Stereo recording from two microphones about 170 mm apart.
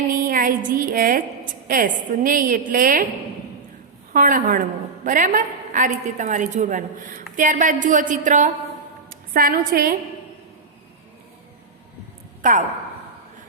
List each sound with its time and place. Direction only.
0.2 s a woman's voice: 55° right (ahead or behind)
4.1 s a woman's voice: 50° right (ahead or behind)
9.0 s a woman's voice: 55° right (ahead or behind)
12.4 s a woman's voice: 50° right (ahead or behind)